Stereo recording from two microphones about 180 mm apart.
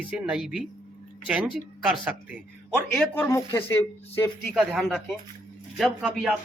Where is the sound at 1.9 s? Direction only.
5° right (ahead or behind).